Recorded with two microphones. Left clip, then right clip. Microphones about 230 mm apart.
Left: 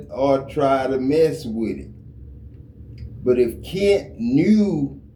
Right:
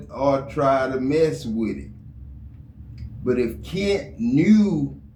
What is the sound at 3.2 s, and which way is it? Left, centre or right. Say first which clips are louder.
A man's voice: left 5 dB; centre.